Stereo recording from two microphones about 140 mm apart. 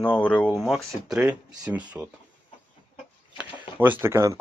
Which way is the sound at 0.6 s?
Centre (ahead or behind).